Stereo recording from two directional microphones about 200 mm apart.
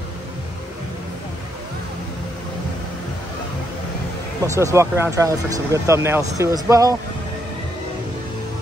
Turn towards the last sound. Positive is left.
turn(degrees=-15)  # may be behind; listen again after turning